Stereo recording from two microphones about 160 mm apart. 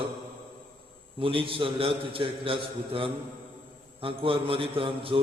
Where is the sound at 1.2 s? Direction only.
35° right (ahead or behind).